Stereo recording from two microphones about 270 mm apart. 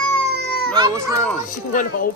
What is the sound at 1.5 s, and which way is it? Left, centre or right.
Speech, left.